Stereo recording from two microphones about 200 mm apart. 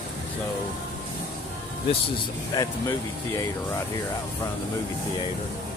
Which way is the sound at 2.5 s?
20° left (ahead or behind).